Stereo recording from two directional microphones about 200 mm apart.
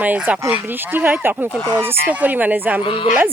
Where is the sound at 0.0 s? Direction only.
10° right (ahead or behind).